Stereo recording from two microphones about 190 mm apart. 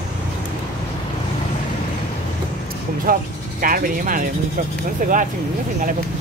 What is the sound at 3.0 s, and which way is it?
Speech, 45° right (ahead or behind).